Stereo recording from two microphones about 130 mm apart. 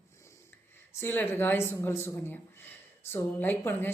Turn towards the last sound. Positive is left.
turn(degrees=15)  # may be behind; listen again after turning